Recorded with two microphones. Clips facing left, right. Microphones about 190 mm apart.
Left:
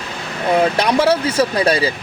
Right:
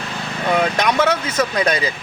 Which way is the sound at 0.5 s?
35° left (ahead or behind).